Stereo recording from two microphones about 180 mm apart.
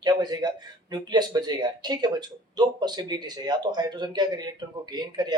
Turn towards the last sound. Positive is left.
turn(degrees=-25)  # may be behind; listen again after turning